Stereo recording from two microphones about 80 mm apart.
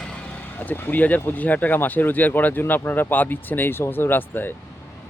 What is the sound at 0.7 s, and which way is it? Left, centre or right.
Speech, left.